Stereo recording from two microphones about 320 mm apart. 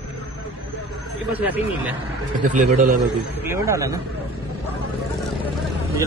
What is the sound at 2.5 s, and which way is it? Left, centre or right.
Speech, right.